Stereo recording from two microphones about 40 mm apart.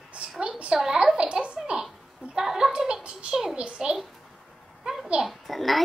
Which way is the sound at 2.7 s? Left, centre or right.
Right.